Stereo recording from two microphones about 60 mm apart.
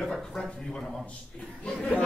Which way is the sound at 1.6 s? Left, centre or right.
Centre.